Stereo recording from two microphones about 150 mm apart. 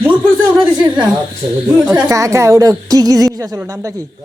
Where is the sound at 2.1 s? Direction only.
20° right (ahead or behind).